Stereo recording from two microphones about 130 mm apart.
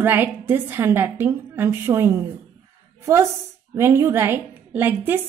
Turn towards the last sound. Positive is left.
turn(degrees=-15)  # may be behind; listen again after turning